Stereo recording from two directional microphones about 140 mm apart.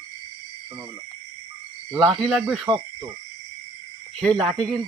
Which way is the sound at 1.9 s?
Centre (ahead or behind).